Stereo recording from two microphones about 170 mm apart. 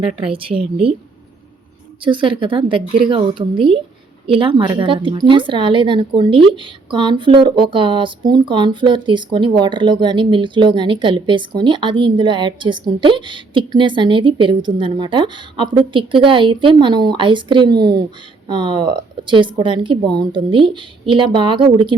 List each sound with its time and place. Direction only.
0.2 s speech: 30° right (ahead or behind)
2.0 s a woman's voice: 30° right (ahead or behind)